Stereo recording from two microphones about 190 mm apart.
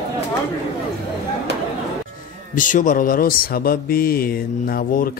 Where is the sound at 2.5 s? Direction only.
45° left (ahead or behind).